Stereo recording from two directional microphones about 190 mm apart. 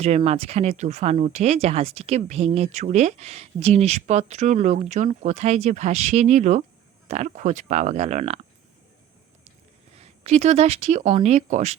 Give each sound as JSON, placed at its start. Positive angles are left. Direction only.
{"t": 0.0, "sound": "speech", "side_deg": -35}
{"t": 10.0, "sound": "speech", "side_deg": -35}